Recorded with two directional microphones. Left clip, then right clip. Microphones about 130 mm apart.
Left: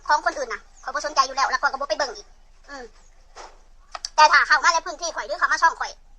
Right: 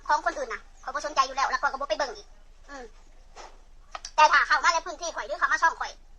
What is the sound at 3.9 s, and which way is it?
Speech, 45° left (ahead or behind).